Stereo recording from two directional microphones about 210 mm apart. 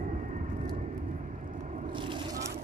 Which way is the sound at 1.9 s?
25° right (ahead or behind).